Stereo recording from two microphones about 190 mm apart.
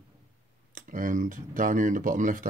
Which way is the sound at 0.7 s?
45° right (ahead or behind).